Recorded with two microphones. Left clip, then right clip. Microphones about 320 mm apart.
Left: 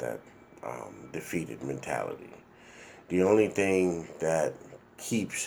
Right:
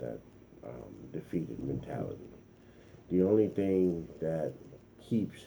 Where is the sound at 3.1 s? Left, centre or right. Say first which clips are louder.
Left 4 dB; left.